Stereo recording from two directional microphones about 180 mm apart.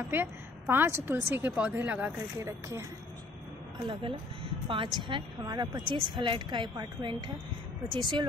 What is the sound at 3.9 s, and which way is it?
Speech, 25° right (ahead or behind).